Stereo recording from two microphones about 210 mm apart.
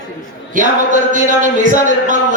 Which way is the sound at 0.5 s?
40° right (ahead or behind).